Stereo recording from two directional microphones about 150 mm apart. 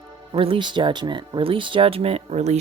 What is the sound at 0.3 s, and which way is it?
Speech, 35° right (ahead or behind).